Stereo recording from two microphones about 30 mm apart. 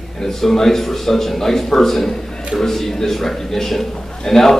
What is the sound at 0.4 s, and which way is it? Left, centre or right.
A man's voice, centre.